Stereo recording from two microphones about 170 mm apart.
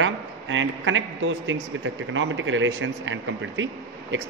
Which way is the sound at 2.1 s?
90° right.